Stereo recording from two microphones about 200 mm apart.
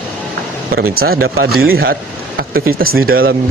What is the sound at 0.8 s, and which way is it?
Speech, 50° right (ahead or behind).